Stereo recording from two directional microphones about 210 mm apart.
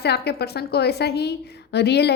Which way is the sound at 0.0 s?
50° left (ahead or behind).